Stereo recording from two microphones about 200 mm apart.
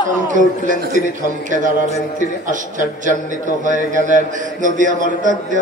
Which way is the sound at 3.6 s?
40° right (ahead or behind).